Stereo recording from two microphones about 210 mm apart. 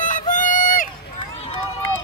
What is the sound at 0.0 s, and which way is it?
Run, 35° left (ahead or behind).